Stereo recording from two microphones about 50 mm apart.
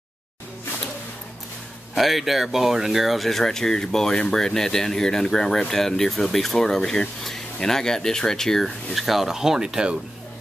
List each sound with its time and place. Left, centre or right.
2.0 s speech: centre